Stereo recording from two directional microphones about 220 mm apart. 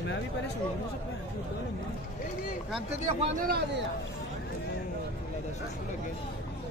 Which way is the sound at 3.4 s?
45° right (ahead or behind).